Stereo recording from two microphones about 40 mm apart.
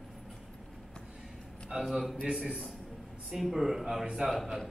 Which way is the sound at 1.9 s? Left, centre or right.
Centre.